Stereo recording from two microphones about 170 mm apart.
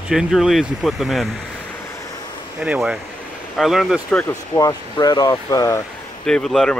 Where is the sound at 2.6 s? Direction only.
5° right (ahead or behind).